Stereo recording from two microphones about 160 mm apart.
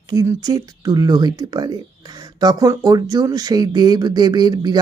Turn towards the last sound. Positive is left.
turn(degrees=-25)  # may be behind; listen again after turning